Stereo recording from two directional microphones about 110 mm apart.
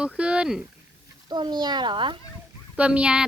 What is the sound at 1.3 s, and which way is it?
Speech, 40° right (ahead or behind).